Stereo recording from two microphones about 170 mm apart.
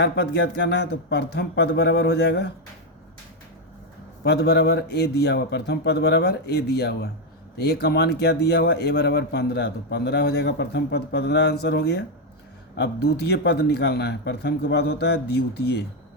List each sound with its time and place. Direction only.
0.0 s speech: 90° left; by 2.5 s 70° left (ahead or behind)
4.2 s speech: 70° left (ahead or behind)